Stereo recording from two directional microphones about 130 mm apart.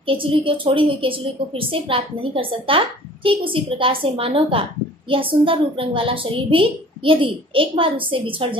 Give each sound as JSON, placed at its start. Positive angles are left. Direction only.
{"t": 0.0, "sound": "a woman's voice", "side_deg": -40}